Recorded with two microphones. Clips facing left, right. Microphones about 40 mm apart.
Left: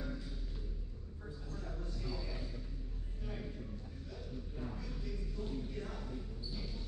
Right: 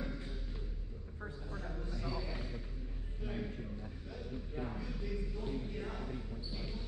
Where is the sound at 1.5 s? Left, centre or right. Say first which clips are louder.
Right 1 dB; right.